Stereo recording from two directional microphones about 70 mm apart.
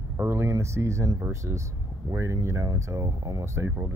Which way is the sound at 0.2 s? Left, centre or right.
Right.